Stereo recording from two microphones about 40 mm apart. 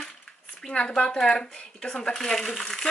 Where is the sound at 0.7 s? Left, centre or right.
Left.